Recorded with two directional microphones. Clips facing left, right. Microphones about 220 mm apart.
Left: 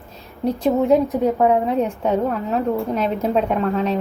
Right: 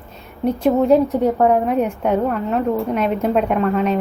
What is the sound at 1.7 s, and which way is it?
Speech, 10° right (ahead or behind).